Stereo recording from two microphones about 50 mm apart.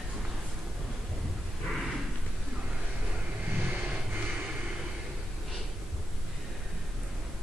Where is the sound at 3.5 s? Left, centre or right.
Right.